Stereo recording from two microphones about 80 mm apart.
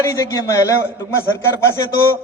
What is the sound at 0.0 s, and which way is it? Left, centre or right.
Speech, left.